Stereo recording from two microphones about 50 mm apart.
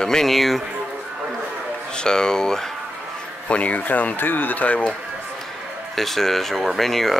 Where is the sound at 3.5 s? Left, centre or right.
Left.